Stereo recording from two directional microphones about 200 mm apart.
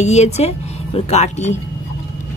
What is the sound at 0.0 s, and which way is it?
Speech, 35° left (ahead or behind).